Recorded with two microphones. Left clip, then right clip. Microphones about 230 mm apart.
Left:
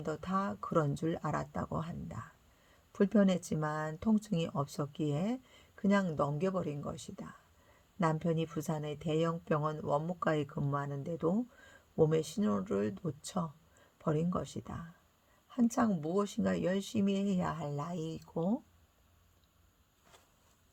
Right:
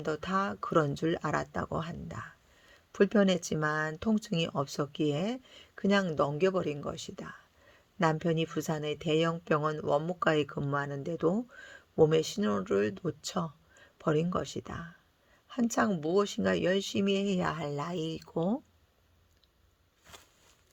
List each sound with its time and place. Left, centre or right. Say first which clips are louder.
0.0 s speech: right 5 dB; right
11.6 s a sound: right 5 dB; right
12.1 s speech: right 5 dB; right
18.3 s speech: right 3 dB; right